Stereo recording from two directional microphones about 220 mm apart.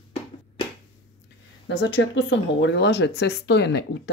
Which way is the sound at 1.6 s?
55° left (ahead or behind).